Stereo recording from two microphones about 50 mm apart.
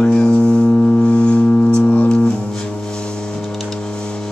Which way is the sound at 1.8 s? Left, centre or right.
Left.